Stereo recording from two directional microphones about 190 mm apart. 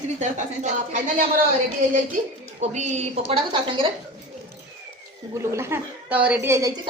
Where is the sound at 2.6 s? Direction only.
40° right (ahead or behind).